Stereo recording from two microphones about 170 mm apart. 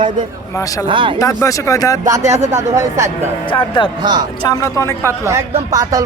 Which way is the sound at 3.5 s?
30° left (ahead or behind).